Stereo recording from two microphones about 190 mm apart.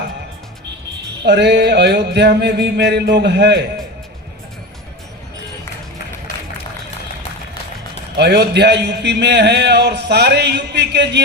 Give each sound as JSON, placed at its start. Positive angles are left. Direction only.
{"t": 1.2, "sound": "a man's voice", "side_deg": -60}
{"t": 8.1, "sound": "a man's voice", "side_deg": -60}